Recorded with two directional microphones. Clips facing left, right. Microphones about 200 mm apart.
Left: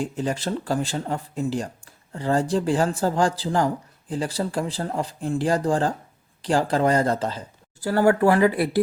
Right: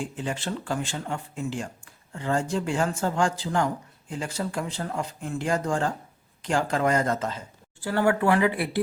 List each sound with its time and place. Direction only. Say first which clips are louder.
0.0 s speech: left 5 dB; 40° left (ahead or behind)